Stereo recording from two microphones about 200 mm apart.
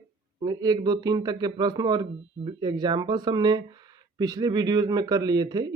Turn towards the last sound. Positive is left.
turn(degrees=-20)  # may be behind; listen again after turning